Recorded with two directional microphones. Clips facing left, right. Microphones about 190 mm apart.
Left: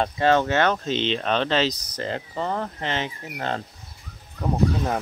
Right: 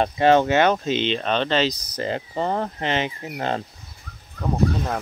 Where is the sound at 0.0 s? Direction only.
15° right (ahead or behind); by 2.0 s centre (ahead or behind).